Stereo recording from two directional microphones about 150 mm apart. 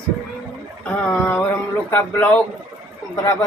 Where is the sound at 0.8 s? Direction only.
10° left (ahead or behind).